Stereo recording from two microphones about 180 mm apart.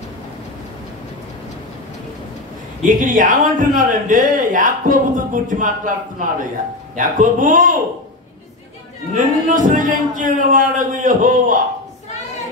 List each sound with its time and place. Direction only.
2.8 s a man's voice: 45° right (ahead or behind)
9.1 s a man's voice: 45° right (ahead or behind)